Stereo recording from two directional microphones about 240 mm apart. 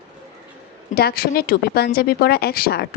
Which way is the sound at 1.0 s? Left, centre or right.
Left.